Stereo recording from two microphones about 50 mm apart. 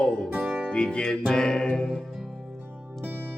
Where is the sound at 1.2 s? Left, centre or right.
Centre.